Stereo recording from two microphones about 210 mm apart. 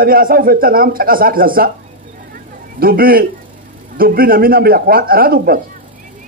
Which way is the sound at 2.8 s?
45° right (ahead or behind).